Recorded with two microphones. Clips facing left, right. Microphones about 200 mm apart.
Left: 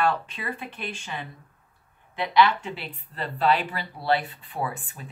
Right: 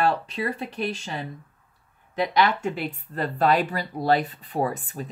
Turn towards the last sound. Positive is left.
turn(degrees=-40)  # may be behind; listen again after turning